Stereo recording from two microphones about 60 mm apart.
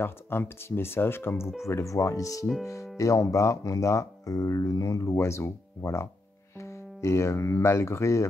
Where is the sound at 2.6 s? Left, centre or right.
Left.